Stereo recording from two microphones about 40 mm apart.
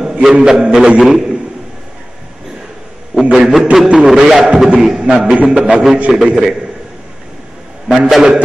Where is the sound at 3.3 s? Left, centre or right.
Centre.